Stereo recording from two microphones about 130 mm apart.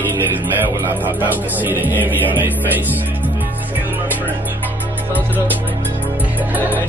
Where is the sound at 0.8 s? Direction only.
15° right (ahead or behind).